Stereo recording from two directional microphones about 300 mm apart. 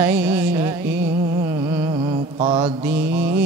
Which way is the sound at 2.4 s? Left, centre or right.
Centre.